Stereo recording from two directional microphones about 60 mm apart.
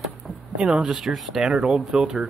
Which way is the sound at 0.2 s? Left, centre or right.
Centre.